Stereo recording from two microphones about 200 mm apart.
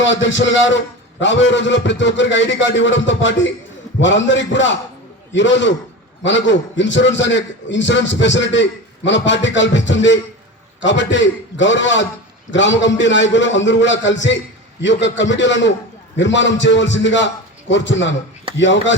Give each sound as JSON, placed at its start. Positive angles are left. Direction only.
{"t": 0.0, "sound": "a man's voice", "side_deg": 65}